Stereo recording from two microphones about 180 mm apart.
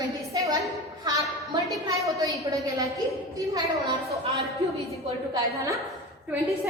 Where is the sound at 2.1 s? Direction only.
20° right (ahead or behind).